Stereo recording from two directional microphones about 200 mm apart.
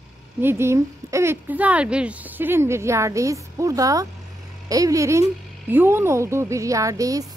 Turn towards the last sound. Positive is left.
turn(degrees=-15)  # may be behind; listen again after turning